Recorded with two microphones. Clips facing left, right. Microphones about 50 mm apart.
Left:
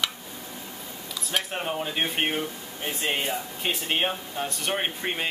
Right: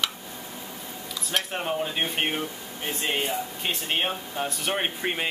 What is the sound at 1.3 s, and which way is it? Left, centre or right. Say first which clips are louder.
Speech: right 1 dB; centre.